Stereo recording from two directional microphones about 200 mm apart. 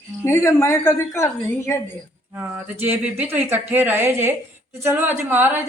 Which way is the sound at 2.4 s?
10° right (ahead or behind).